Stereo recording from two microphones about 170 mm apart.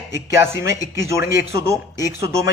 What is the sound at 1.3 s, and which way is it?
A man's voice, 15° right (ahead or behind).